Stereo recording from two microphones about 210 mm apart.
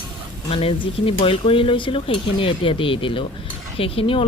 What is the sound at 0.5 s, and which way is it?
Speech, 25° left (ahead or behind).